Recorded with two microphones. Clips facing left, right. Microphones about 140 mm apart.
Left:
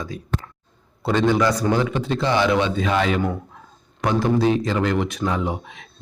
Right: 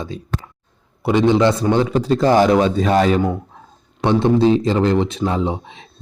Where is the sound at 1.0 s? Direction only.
15° right (ahead or behind).